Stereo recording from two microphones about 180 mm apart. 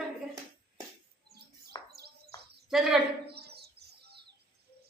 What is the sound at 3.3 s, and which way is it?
Bird, 65° right (ahead or behind).